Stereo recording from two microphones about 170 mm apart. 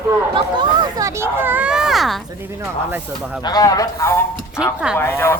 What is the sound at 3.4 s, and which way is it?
A man's voice, 25° left (ahead or behind).